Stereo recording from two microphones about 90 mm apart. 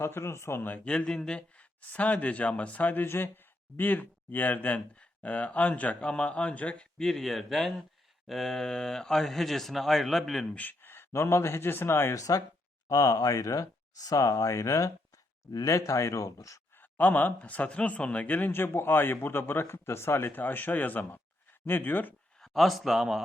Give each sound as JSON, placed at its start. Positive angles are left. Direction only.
{"t": 0.0, "sound": "speech", "side_deg": 30}
{"t": 10.5, "sound": "speech", "side_deg": 20}
{"t": 16.7, "sound": "speech", "side_deg": 20}
{"t": 22.4, "sound": "a man's voice", "side_deg": 0}